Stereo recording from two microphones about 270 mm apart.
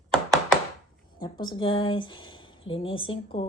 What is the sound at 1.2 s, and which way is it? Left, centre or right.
Speech, centre.